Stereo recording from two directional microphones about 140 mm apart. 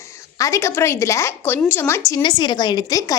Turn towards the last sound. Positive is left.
turn(degrees=25)  # may be behind; listen again after turning